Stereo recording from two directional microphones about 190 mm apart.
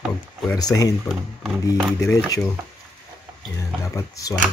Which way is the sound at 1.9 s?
15° left (ahead or behind).